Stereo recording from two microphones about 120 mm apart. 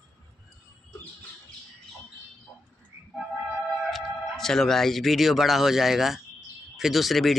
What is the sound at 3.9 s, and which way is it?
Speech, 5° left (ahead or behind).